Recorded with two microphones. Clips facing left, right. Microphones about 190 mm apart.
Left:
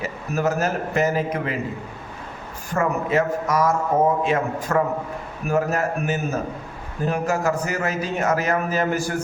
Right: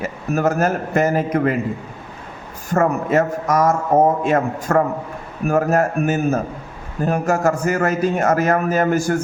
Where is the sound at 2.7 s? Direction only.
45° right (ahead or behind).